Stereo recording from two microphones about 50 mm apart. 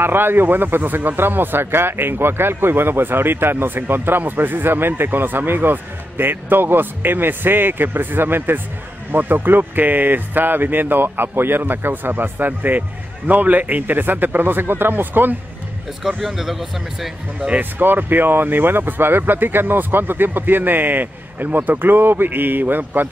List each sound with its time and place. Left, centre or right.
0.0 s a man's voice: right
16.0 s speech: centre
17.6 s speech: right